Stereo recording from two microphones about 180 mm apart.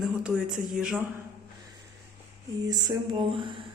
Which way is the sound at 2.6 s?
20° right (ahead or behind).